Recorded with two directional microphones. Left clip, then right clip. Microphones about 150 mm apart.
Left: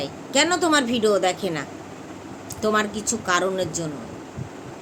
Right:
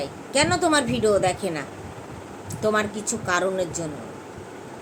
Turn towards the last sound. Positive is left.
turn(degrees=15)  # may be behind; listen again after turning